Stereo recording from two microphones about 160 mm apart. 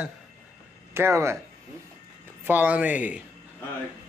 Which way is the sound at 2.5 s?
10° right (ahead or behind).